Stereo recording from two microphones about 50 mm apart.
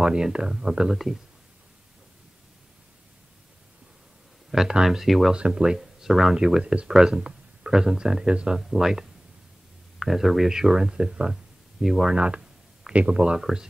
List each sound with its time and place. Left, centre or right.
0.0 s speech: centre
4.5 s speech: centre
5.3 s speech: centre
6.3 s speech: centre
6.9 s speech: centre
8.5 s speech: centre
11.8 s speech: centre
12.2 s a sound: centre
12.9 s speech: right